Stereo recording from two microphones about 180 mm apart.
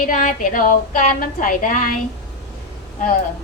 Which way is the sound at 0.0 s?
50° left (ahead or behind).